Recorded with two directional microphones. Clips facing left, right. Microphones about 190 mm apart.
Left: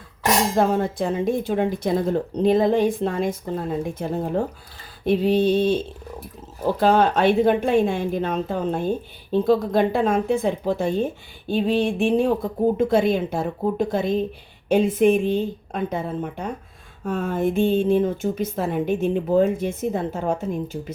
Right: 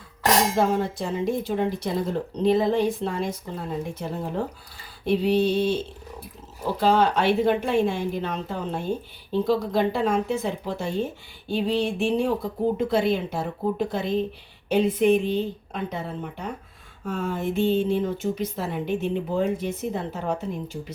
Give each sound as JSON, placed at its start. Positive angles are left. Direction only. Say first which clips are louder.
{"t": 0.5, "sound": "speech", "louder": "left 3 dB", "side_deg": 55}
{"t": 5.0, "sound": "speech", "louder": "left 3 dB", "side_deg": 50}
{"t": 6.7, "sound": "speech", "louder": "left 2 dB", "side_deg": 55}